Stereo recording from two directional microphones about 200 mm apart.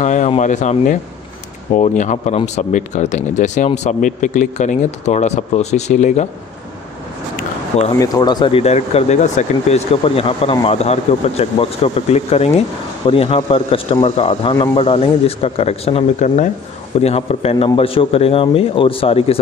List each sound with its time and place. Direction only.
0.0 s speech: 35° left (ahead or behind)
8.0 s speech: 20° left (ahead or behind)